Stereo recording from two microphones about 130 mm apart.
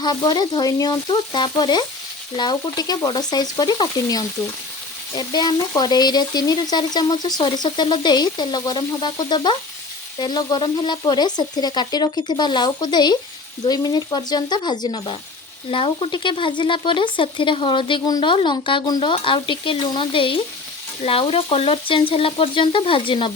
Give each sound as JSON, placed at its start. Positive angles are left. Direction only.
{"t": 0.0, "sound": "frying", "side_deg": 35}